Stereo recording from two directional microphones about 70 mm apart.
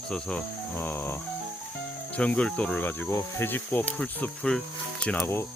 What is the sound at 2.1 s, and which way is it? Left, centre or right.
Speech, centre.